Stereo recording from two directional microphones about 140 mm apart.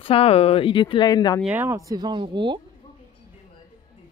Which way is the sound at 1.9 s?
30° right (ahead or behind).